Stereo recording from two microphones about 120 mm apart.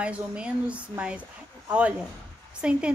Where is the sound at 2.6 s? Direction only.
10° right (ahead or behind).